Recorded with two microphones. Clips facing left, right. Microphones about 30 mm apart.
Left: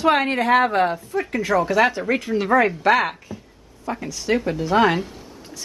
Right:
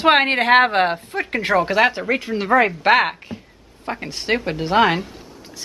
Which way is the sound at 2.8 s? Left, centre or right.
Right.